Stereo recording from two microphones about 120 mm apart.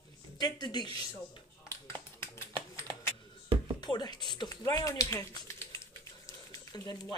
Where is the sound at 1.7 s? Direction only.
20° left (ahead or behind).